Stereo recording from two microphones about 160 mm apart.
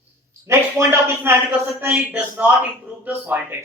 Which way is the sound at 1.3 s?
15° right (ahead or behind).